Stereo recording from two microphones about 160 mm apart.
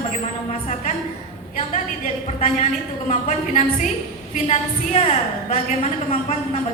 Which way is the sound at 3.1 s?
50° left (ahead or behind).